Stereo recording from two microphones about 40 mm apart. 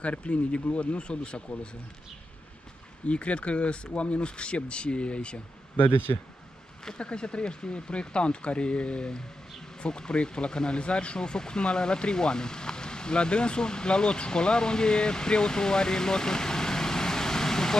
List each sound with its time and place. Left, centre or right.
0.0 s speech: left
3.1 s speech: left
5.8 s a man's voice: left
6.8 s speech: left